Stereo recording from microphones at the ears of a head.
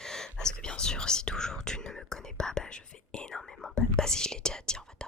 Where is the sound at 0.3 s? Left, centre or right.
Left.